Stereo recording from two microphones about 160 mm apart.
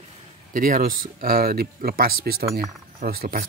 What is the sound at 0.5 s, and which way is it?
Speech, 60° right (ahead or behind).